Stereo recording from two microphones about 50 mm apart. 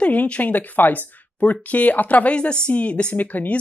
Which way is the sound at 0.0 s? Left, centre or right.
Left.